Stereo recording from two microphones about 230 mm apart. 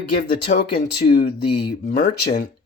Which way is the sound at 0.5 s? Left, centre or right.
Left.